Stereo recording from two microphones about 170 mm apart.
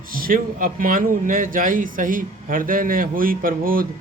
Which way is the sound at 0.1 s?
55° right (ahead or behind).